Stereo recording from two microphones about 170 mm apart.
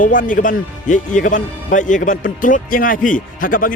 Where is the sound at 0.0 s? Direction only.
50° left (ahead or behind).